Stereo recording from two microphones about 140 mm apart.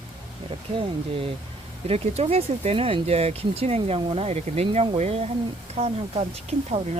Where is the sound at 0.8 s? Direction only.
40° right (ahead or behind).